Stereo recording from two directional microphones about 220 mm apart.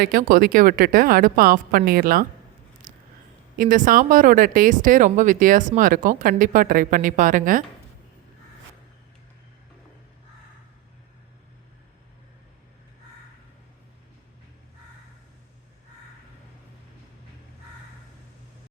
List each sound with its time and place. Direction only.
0.0 s speech: 40° right (ahead or behind)
2.8 s a sound: 35° right (ahead or behind)
3.6 s speech: 40° right (ahead or behind)